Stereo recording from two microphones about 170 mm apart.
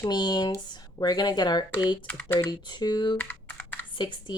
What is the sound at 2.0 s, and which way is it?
Speech, 10° left (ahead or behind).